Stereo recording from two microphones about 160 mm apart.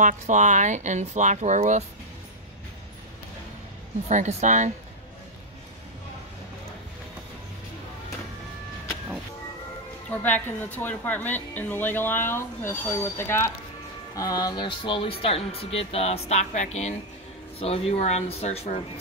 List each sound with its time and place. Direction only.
0.0 s speech: 50° right (ahead or behind)
4.1 s speech: 50° right (ahead or behind)
10.1 s a woman's voice: 10° left (ahead or behind); by 18.8 s 40° left (ahead or behind)